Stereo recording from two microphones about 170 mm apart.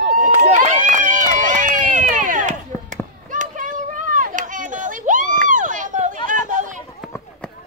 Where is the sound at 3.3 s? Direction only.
50° right (ahead or behind).